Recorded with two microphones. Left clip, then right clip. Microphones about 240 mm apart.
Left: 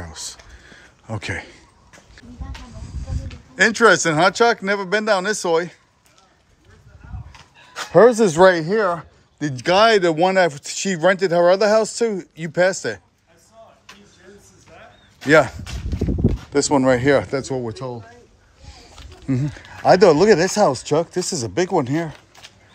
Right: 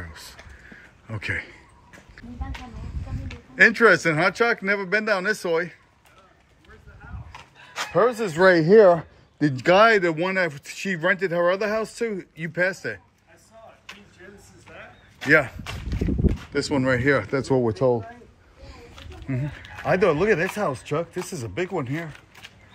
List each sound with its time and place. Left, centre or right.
0.0 s a sound: centre
3.1 s speech: centre
7.3 s a sound: centre
7.9 s speech: left
8.4 s speech: centre
9.6 s speech: centre
15.2 s speech: centre
16.6 s speech: centre
17.4 s speech: centre
19.2 s speech: left